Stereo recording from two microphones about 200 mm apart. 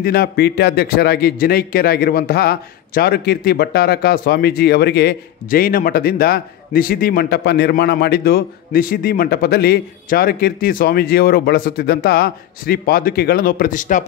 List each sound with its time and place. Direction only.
0.0 s a man's voice: 50° left (ahead or behind)